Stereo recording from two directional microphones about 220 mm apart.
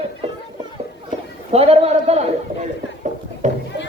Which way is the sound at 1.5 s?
30° right (ahead or behind).